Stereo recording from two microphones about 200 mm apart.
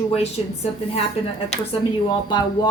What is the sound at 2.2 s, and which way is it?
Speech, 20° left (ahead or behind).